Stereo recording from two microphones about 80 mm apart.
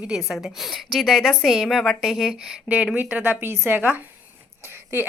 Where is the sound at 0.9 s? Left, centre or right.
Centre.